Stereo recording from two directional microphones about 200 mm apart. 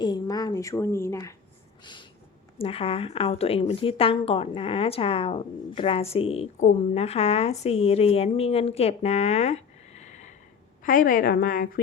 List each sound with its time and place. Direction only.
0.0 s a woman's voice: 20° left (ahead or behind)
1.8 s a sound: 25° left (ahead or behind)
2.6 s a woman's voice: 30° left (ahead or behind); by 11.8 s 45° left (ahead or behind)